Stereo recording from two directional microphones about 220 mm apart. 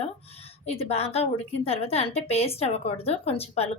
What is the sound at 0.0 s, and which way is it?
A woman's voice, 25° left (ahead or behind).